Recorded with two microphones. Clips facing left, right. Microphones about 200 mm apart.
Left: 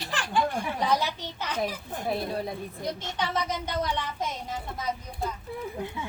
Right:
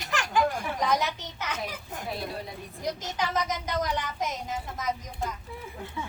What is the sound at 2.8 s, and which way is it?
A woman's voice, 30° left (ahead or behind).